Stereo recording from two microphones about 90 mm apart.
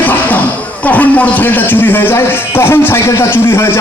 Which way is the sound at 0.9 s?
20° left (ahead or behind).